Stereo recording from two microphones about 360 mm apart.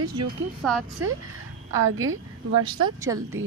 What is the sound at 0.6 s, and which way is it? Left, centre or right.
Speech, centre.